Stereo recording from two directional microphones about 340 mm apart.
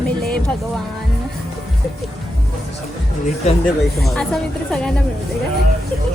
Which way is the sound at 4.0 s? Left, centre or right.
Centre.